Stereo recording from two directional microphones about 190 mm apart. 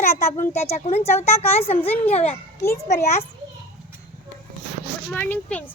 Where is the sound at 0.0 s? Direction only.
15° left (ahead or behind).